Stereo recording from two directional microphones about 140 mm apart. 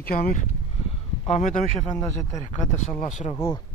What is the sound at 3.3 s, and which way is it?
Speech, 20° left (ahead or behind).